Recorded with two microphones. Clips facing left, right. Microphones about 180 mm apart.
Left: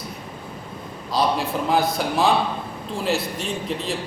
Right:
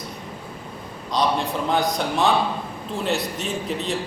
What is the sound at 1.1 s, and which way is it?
A man's voice, 5° left (ahead or behind).